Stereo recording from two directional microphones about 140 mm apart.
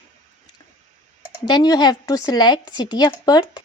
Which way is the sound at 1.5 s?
30° left (ahead or behind).